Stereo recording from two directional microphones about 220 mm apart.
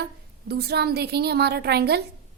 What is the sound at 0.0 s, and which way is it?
Speech, 45° right (ahead or behind).